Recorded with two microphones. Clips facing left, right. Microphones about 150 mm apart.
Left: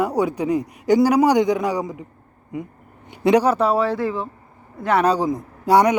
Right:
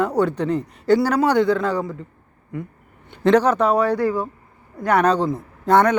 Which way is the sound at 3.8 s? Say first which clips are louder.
Right 2 dB; 25° left (ahead or behind).